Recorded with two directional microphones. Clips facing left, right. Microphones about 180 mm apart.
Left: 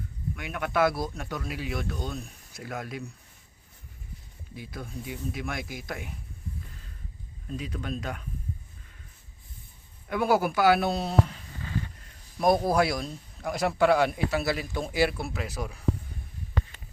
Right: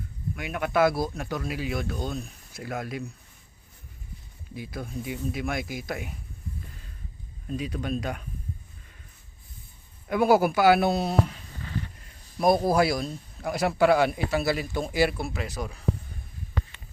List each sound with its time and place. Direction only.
0.3 s a man's voice: 10° right (ahead or behind)
4.5 s speech: 10° right (ahead or behind)
7.5 s speech: 15° right (ahead or behind)
10.1 s speech: 10° right (ahead or behind)
12.4 s a man's voice: 5° right (ahead or behind)